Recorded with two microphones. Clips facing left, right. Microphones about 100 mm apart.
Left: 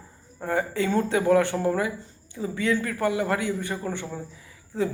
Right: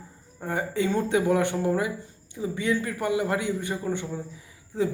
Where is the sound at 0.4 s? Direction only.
20° right (ahead or behind).